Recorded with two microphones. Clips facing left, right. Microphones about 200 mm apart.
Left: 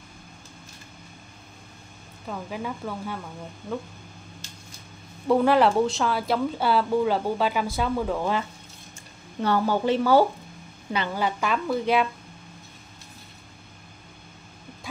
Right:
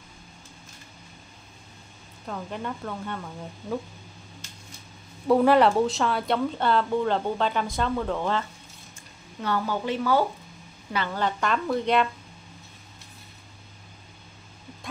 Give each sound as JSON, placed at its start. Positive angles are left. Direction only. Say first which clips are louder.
{"t": 2.2, "sound": "a woman's voice", "louder": "left 1 dB", "side_deg": 5}
{"t": 5.3, "sound": "speech", "louder": "right 1 dB", "side_deg": 0}
{"t": 9.4, "sound": "speech", "louder": "left 4 dB", "side_deg": 30}
{"t": 10.9, "sound": "a woman's voice", "louder": "left 1 dB", "side_deg": 15}